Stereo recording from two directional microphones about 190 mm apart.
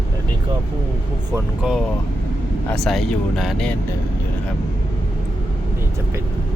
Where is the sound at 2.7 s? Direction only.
Centre (ahead or behind).